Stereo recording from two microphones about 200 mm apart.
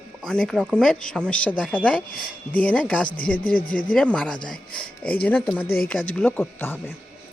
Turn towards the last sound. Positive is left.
turn(degrees=10)  # may be behind; listen again after turning